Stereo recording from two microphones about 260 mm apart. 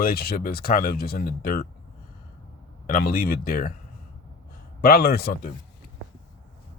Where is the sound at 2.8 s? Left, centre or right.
Left.